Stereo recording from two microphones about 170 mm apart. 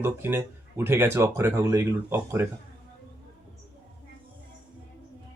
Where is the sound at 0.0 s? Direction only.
15° right (ahead or behind).